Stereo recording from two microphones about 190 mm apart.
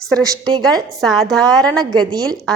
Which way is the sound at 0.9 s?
Centre (ahead or behind).